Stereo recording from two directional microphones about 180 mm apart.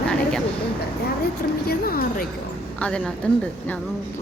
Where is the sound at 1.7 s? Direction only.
55° left (ahead or behind).